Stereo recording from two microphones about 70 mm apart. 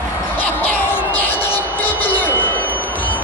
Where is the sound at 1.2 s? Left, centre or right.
Left.